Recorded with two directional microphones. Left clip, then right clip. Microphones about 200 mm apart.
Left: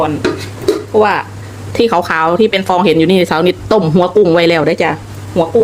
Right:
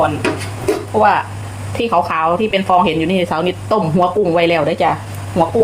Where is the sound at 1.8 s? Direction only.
50° left (ahead or behind).